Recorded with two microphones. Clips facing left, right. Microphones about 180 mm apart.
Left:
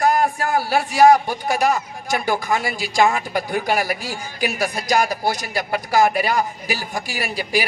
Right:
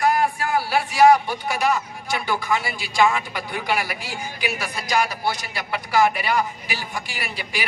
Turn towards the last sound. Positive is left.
turn(degrees=40)  # may be behind; listen again after turning